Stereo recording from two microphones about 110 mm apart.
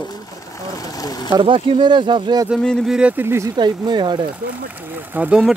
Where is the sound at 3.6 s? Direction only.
40° right (ahead or behind).